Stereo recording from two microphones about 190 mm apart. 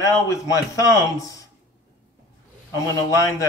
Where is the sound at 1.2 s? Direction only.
20° left (ahead or behind).